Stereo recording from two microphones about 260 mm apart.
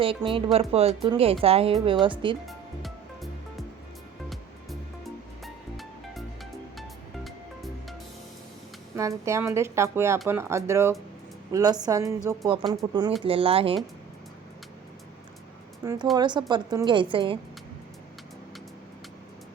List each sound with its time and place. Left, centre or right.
0.0 s speech: centre
2.5 s music: centre
4.3 s music: centre
9.0 s speech: centre
15.8 s speech: centre